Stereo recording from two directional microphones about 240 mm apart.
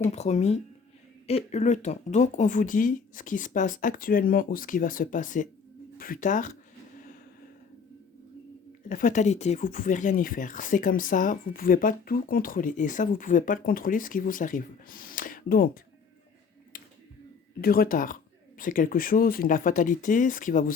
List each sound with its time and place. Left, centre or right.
0.1 s speech: left
8.9 s speech: left
16.7 s a sound: left
17.6 s speech: left